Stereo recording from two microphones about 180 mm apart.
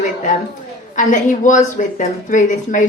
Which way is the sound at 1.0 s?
45° left (ahead or behind).